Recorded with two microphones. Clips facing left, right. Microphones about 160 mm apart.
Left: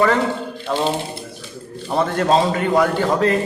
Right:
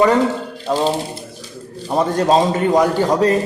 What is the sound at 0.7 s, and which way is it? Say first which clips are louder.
Speech: right 3 dB; 20° right (ahead or behind).